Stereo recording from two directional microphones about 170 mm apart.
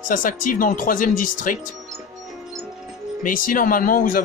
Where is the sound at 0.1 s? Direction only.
55° left (ahead or behind).